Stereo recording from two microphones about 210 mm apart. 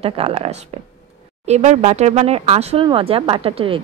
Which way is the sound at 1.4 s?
35° right (ahead or behind).